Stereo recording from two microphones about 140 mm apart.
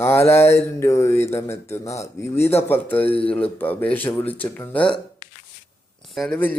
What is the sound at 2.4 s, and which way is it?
Speech, 50° left (ahead or behind).